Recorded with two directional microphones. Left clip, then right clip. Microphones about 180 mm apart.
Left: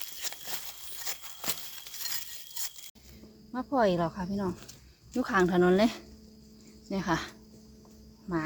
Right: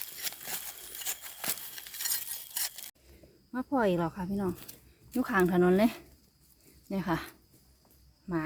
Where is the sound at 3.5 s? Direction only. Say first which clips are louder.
Left 2 dB; 15° right (ahead or behind).